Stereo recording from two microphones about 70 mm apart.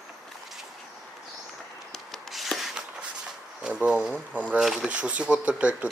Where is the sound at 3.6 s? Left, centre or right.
Centre.